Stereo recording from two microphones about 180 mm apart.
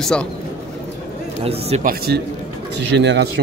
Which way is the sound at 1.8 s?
55° right (ahead or behind).